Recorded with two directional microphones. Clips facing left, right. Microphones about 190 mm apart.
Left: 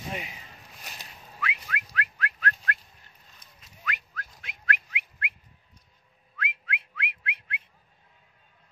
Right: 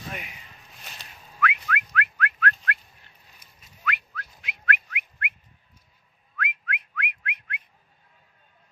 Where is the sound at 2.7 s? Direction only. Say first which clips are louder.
Right 3 dB; 45° left (ahead or behind).